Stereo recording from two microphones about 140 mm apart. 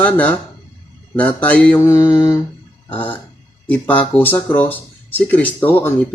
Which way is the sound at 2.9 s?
10° left (ahead or behind).